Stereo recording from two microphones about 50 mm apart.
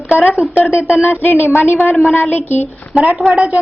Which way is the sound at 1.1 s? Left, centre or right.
Left.